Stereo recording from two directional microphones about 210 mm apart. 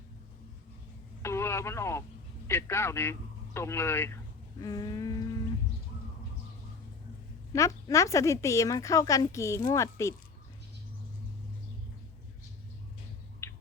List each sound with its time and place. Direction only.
1.2 s radio: 10° left (ahead or behind)
2.5 s speech: 10° left (ahead or behind)
7.5 s speech: 15° left (ahead or behind)
13.4 s squawk: 10° left (ahead or behind)